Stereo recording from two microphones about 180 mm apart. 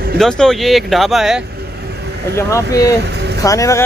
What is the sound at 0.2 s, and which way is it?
Speech, 5° left (ahead or behind).